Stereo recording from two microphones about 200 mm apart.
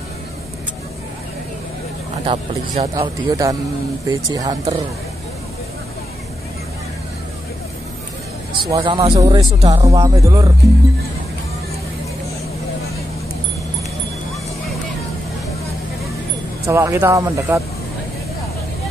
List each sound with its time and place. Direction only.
2.2 s speech: 30° right (ahead or behind)
2.9 s speech: 20° right (ahead or behind)
8.5 s speech: 20° right (ahead or behind)
16.6 s speech: 15° right (ahead or behind)